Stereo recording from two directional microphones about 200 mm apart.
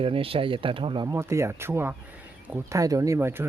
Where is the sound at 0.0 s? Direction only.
25° right (ahead or behind).